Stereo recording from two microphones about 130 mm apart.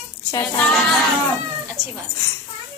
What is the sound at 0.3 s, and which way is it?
Child singing, 25° left (ahead or behind).